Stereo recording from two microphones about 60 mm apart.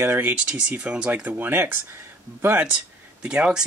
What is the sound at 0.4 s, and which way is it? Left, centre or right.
Speech, centre.